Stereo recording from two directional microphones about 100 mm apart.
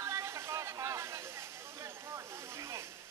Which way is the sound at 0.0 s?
30° right (ahead or behind).